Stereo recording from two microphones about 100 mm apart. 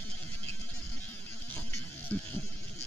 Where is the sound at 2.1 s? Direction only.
15° left (ahead or behind).